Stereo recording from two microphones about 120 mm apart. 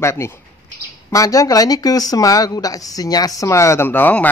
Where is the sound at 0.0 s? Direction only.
20° left (ahead or behind).